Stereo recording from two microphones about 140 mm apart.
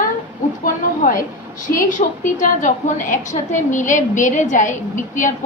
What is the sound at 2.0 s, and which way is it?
A woman's voice, 60° left (ahead or behind).